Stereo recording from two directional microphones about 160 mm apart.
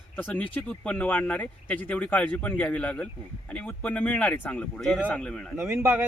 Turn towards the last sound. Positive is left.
turn(degrees=-15)  # may be behind; listen again after turning